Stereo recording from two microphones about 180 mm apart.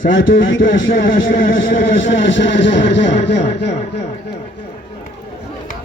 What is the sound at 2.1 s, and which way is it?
Speech, 90° left.